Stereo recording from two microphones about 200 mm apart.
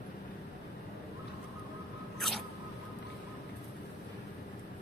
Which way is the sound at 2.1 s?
Centre (ahead or behind).